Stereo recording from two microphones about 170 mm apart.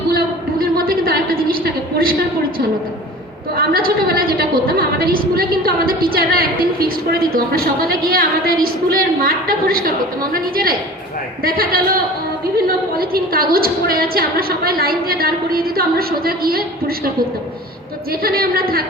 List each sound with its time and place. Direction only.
0.6 s a sound: 60° right (ahead or behind)
3.5 s a woman's voice: 60° right (ahead or behind)
18.1 s a woman's voice: 60° right (ahead or behind)